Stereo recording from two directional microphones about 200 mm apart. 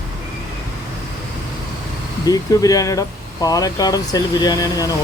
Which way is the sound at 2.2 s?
20° left (ahead or behind).